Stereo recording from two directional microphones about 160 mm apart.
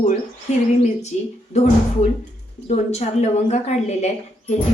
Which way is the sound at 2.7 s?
45° left (ahead or behind).